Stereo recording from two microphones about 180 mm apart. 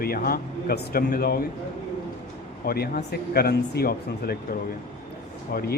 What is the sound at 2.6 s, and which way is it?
Speech, 60° left (ahead or behind).